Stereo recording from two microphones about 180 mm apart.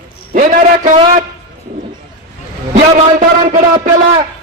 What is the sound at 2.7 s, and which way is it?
Speech, 45° right (ahead or behind).